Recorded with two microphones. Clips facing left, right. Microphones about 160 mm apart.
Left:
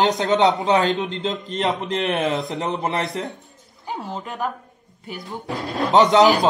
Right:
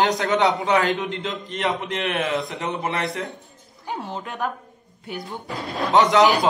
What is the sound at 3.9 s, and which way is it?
Speech, centre (ahead or behind).